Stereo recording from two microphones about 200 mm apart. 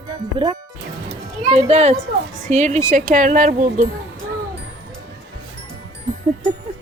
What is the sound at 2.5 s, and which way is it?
Speech, 35° right (ahead or behind).